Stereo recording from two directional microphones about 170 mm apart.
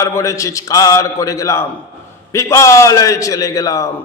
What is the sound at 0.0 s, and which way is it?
A man's voice, 15° left (ahead or behind).